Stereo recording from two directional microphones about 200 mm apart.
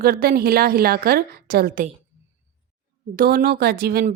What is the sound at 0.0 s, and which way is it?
Speech, 50° right (ahead or behind).